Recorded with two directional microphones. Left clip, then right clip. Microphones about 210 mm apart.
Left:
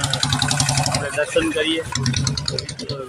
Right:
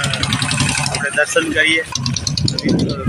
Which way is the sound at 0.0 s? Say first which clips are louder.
Right 2 dB; 55° left (ahead or behind).